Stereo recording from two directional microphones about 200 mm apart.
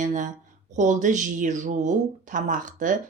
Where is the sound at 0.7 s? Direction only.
35° right (ahead or behind).